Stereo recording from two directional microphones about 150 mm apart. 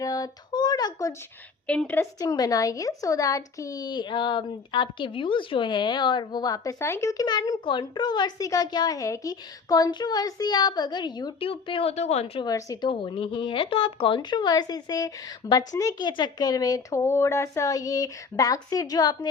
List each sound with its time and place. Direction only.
0.0 s a sound: 25° left (ahead or behind)
1.6 s a woman's voice: 10° left (ahead or behind)
2.1 s speech: 25° left (ahead or behind); by 12.5 s 40° left (ahead or behind)
12.5 s speech: 25° left (ahead or behind)